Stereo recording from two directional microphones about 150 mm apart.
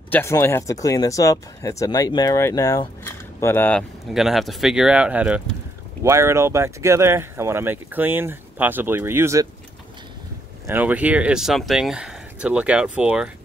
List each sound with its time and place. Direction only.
0.1 s speech: 15° left (ahead or behind)
4.1 s speech: centre (ahead or behind)
6.0 s speech: 20° right (ahead or behind)
10.7 s speech: 10° right (ahead or behind)